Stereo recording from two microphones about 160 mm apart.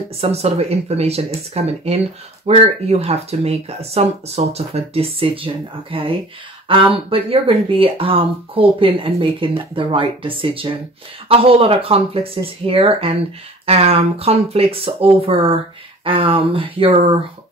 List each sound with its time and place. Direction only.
0.2 s speech: 40° right (ahead or behind)